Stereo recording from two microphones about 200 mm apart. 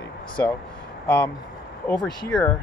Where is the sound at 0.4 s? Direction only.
15° left (ahead or behind).